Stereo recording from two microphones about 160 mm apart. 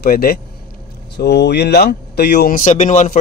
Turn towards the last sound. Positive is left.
turn(degrees=50)  # may be behind; listen again after turning